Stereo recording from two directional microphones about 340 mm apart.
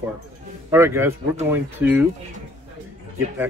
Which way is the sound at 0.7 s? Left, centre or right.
Centre.